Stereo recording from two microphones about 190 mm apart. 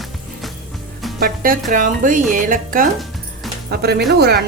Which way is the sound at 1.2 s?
50° right (ahead or behind).